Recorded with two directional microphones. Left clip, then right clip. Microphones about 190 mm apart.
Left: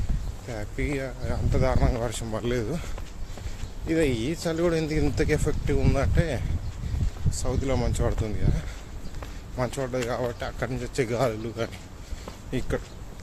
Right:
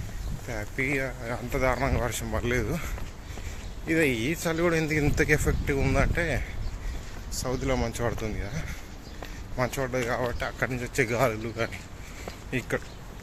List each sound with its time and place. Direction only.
0.4 s speech: 10° left (ahead or behind)
7.4 s speech: 5° left (ahead or behind)